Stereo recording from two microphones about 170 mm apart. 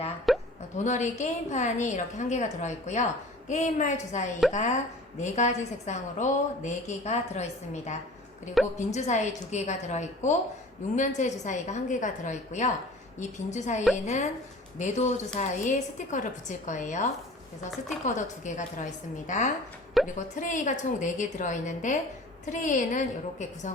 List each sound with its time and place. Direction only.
0.3 s hiccup: centre (ahead or behind)
0.9 s a woman's voice: 45° left (ahead or behind)